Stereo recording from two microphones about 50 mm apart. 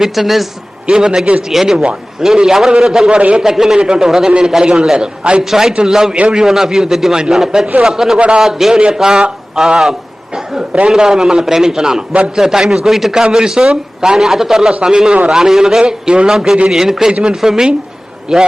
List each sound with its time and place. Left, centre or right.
0.0 s a man's voice: centre
0.9 s a man's voice: centre
1.4 s a man's voice: centre
3.1 s a man's voice: right
3.4 s a man's voice: centre
10.3 s chuckle: centre
10.8 s a man's voice: centre